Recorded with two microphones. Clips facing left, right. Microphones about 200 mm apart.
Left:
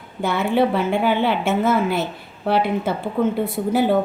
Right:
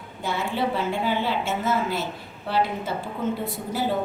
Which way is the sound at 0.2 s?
60° left (ahead or behind).